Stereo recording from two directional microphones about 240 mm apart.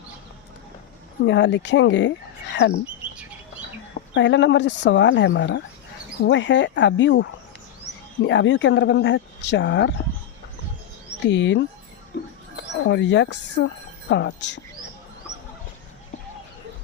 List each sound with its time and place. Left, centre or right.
1.2 s speech: left
3.9 s speech: left
11.2 s speech: left
12.9 s speech: left